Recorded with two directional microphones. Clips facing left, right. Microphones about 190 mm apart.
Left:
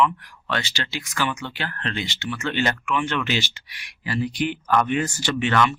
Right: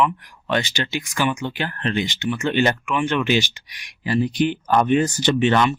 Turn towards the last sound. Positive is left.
turn(degrees=-25)  # may be behind; listen again after turning